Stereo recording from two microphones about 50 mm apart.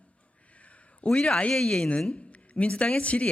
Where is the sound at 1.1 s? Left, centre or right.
Centre.